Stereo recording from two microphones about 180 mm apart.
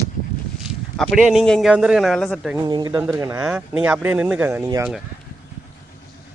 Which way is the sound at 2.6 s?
20° right (ahead or behind).